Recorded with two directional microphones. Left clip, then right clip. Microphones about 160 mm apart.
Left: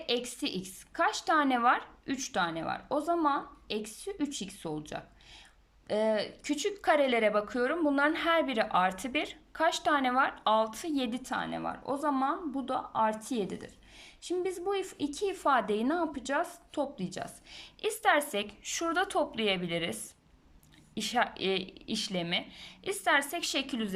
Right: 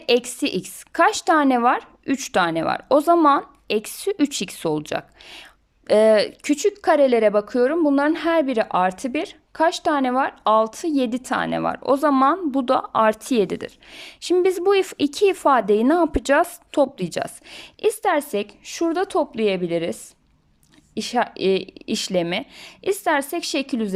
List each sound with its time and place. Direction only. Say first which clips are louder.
0.0 s speech: right 13 dB; 45° right (ahead or behind)